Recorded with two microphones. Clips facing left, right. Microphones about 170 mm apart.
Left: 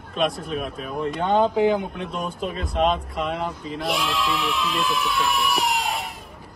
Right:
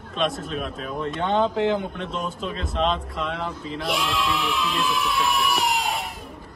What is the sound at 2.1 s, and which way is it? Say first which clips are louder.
Speech: left 2 dB; 50° left (ahead or behind).